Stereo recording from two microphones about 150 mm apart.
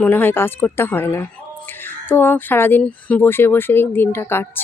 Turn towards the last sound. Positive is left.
turn(degrees=15)  # may be behind; listen again after turning